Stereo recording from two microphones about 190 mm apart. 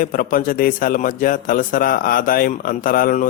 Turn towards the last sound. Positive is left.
turn(degrees=45)  # may be behind; listen again after turning